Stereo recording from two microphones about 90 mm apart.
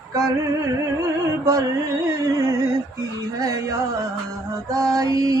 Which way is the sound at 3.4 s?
40° right (ahead or behind).